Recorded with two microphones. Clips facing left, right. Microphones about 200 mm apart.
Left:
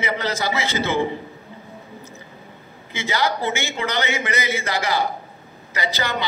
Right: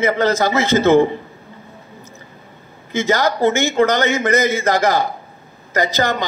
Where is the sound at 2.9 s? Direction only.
45° right (ahead or behind).